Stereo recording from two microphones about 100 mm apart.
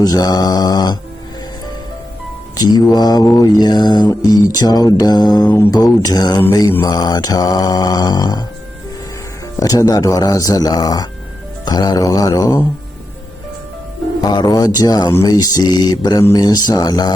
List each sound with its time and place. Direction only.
0.0 s mantra: 40° left (ahead or behind)
2.6 s mantra: 45° left (ahead or behind)
5.5 s mantra: 25° left (ahead or behind)
6.0 s mantra: 40° left (ahead or behind)
9.6 s mantra: 35° left (ahead or behind)
14.2 s mantra: 40° left (ahead or behind)